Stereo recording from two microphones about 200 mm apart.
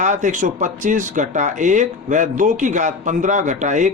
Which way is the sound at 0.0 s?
40° right (ahead or behind).